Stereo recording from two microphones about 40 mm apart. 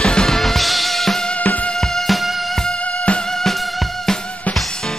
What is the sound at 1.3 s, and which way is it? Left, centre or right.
Music, left.